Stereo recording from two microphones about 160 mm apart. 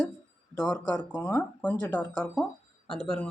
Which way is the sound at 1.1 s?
10° left (ahead or behind).